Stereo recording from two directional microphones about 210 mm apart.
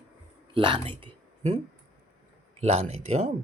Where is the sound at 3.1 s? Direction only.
30° right (ahead or behind).